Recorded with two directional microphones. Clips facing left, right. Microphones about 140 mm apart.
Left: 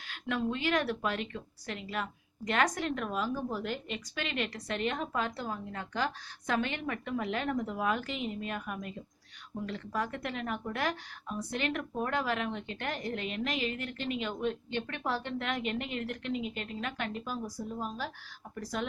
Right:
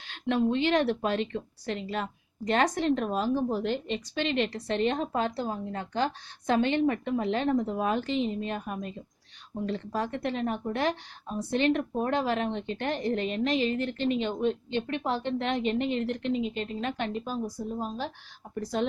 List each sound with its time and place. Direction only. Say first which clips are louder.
0.1 s speech: right 7 dB; 25° right (ahead or behind)